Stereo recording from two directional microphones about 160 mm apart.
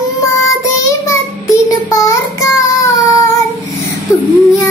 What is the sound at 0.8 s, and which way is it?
Child singing, 20° left (ahead or behind).